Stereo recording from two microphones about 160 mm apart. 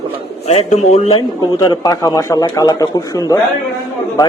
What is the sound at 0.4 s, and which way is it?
Speech, 45° left (ahead or behind).